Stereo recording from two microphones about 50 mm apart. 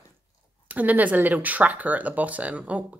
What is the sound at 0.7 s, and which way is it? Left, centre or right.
Speech, right.